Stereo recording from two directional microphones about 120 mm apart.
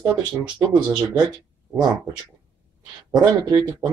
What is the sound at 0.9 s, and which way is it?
Speech, 35° right (ahead or behind).